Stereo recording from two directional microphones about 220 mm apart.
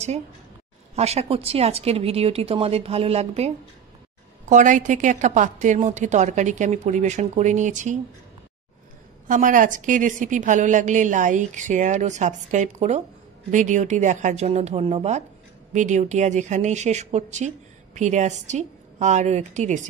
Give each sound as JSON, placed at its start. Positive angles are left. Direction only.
{"t": 0.9, "sound": "a woman's voice", "side_deg": -30}
{"t": 9.3, "sound": "a woman's voice", "side_deg": -35}